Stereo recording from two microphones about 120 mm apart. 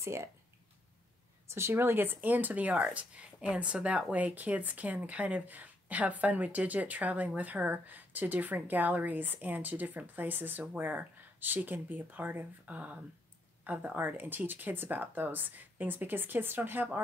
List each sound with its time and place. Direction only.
0.0 s speech: 25° right (ahead or behind)
1.5 s speech: 20° right (ahead or behind)